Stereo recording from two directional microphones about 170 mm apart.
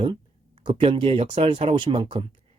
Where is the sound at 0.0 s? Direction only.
30° right (ahead or behind).